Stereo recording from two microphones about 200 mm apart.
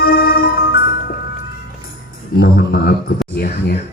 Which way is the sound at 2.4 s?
50° left (ahead or behind).